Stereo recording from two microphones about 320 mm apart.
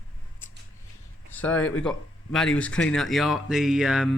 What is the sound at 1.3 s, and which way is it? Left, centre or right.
Speech, centre.